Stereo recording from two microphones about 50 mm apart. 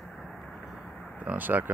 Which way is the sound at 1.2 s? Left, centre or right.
Right.